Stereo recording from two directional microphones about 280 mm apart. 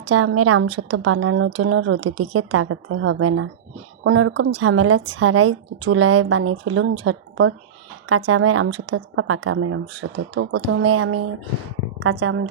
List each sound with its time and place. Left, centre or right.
0.0 s a woman's voice: right
12.2 s a woman's voice: right